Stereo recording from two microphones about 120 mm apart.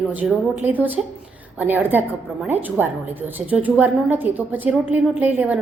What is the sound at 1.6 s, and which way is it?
A woman's voice, 15° right (ahead or behind).